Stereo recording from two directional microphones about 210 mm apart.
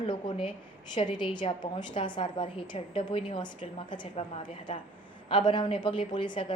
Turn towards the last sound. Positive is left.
turn(degrees=25)  # may be behind; listen again after turning